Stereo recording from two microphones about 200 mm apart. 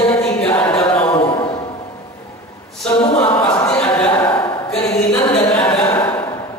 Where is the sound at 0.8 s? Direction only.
30° left (ahead or behind).